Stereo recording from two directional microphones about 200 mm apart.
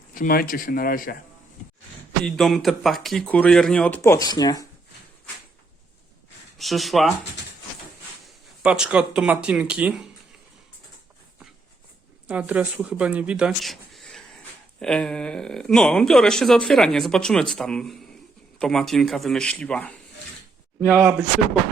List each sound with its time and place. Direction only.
0.1 s a man's voice: 45° left (ahead or behind)
2.2 s speech: centre (ahead or behind); by 4.6 s 20° left (ahead or behind)
6.6 s speech: centre (ahead or behind)
8.6 s speech: 5° right (ahead or behind)
12.3 s speech: 5° right (ahead or behind)
20.9 s speech: 5° right (ahead or behind)